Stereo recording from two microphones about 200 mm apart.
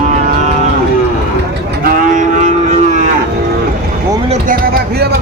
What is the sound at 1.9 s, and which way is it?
Cattle, 40° right (ahead or behind).